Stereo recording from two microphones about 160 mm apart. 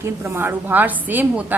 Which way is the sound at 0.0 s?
15° right (ahead or behind).